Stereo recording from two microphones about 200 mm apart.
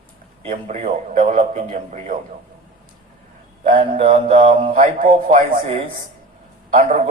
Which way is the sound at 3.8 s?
30° right (ahead or behind).